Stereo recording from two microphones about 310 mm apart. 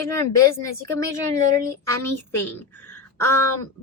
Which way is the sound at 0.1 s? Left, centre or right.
Centre.